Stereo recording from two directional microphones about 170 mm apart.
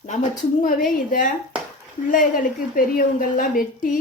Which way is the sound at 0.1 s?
50° left (ahead or behind).